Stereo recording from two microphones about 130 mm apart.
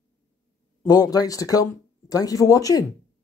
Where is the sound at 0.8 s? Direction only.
30° left (ahead or behind).